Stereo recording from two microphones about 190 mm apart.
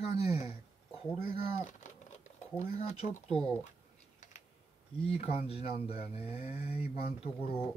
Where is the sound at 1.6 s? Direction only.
40° left (ahead or behind).